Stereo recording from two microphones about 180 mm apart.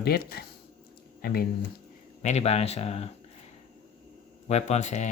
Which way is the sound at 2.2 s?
40° left (ahead or behind).